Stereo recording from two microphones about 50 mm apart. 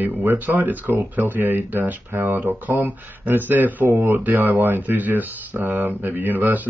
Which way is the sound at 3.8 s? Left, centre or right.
Right.